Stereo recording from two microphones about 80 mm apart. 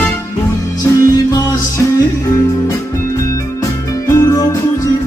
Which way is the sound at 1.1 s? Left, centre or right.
Left.